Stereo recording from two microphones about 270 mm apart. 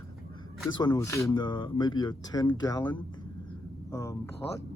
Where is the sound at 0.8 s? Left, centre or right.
Centre.